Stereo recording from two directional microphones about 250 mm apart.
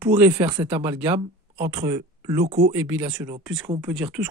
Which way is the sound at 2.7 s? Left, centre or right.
Centre.